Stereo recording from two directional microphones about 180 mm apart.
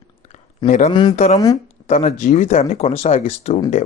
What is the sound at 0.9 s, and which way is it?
Speech, 25° left (ahead or behind).